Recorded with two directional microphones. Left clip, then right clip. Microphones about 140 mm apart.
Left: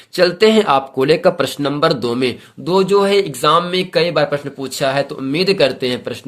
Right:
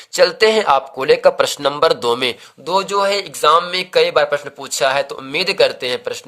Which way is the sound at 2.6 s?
20° right (ahead or behind).